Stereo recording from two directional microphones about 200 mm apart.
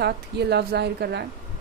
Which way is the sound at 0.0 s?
55° right (ahead or behind).